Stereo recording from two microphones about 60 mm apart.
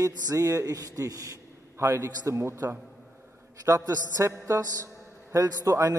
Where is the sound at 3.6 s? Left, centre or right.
Right.